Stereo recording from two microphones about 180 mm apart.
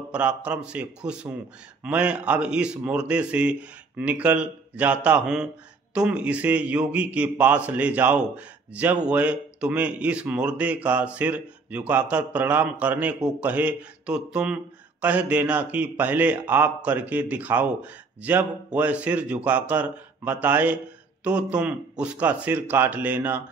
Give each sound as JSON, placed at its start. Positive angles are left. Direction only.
{"t": 0.1, "sound": "speech", "side_deg": -5}